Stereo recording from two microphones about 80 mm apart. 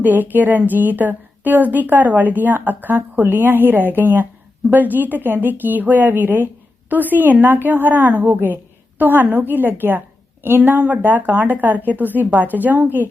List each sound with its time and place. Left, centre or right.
0.0 s a woman's voice: right